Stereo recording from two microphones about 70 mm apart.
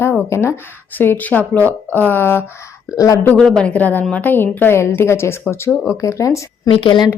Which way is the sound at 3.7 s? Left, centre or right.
Left.